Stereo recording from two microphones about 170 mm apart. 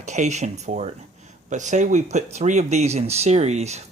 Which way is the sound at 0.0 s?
45° right (ahead or behind).